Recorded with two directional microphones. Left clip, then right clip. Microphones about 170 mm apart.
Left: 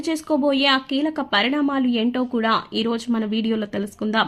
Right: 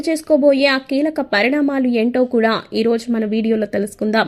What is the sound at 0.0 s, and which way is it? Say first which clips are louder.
Speech: right 7 dB; 15° right (ahead or behind).